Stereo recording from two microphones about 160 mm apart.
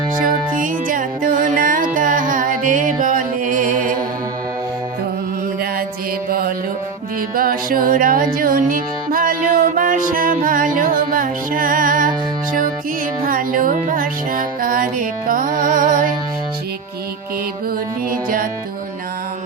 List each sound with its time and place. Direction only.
0.2 s music: 55° right (ahead or behind)
7.3 s music: 65° right (ahead or behind)
13.2 s music: 60° right (ahead or behind)
18.1 s music: 60° right (ahead or behind)